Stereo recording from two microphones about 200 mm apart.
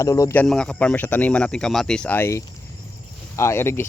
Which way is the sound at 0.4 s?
5° left (ahead or behind).